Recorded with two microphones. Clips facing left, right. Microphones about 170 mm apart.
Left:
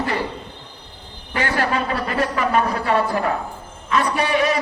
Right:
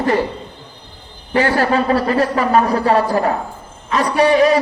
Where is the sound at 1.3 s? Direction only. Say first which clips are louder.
Right 6 dB; 40° right (ahead or behind).